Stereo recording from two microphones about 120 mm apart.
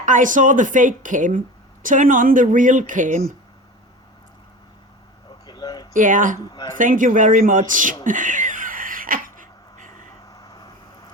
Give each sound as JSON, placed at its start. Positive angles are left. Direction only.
{"t": 0.0, "sound": "a woman's voice", "side_deg": -90}
{"t": 5.5, "sound": "a sound", "side_deg": 35}
{"t": 5.9, "sound": "a woman's voice", "side_deg": -90}
{"t": 6.5, "sound": "a man's voice", "side_deg": 35}
{"t": 6.7, "sound": "a woman's voice", "side_deg": -90}
{"t": 9.4, "sound": "a sound", "side_deg": -90}
{"t": 10.3, "sound": "vehicle", "side_deg": 30}